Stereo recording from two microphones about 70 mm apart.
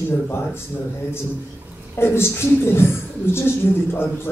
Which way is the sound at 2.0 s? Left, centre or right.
Left.